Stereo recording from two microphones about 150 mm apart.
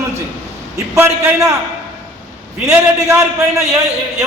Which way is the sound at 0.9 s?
15° right (ahead or behind).